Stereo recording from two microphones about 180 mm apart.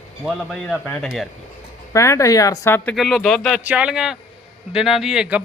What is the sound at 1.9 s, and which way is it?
Speech, 15° left (ahead or behind).